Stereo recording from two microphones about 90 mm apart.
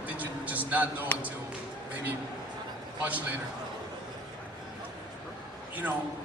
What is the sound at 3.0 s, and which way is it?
Speech, 20° right (ahead or behind).